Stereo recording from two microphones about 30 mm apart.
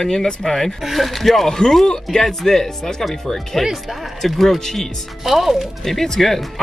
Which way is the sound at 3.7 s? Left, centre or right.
Centre.